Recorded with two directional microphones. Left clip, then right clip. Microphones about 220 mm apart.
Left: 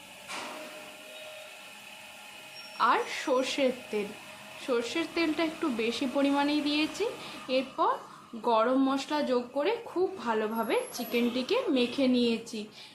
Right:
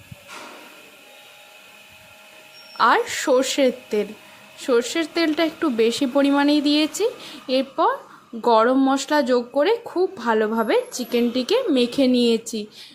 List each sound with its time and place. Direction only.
2.7 s speech: 35° right (ahead or behind)